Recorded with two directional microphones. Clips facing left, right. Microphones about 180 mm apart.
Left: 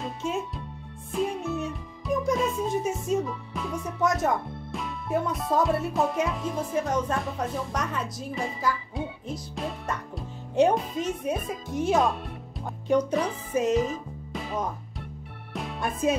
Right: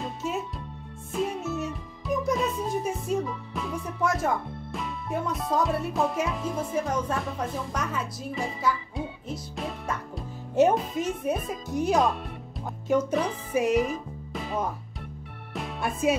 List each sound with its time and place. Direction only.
0.0 s music: 5° right (ahead or behind)
3.1 s speech: centre (ahead or behind)
13.9 s music: centre (ahead or behind)